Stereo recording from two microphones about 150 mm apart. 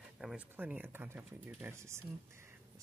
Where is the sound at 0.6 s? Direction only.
10° right (ahead or behind).